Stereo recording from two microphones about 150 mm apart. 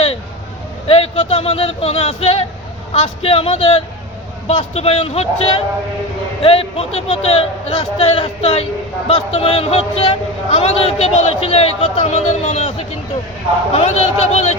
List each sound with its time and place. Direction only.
0.9 s speech: 40° left (ahead or behind)
13.7 s speech: 45° left (ahead or behind)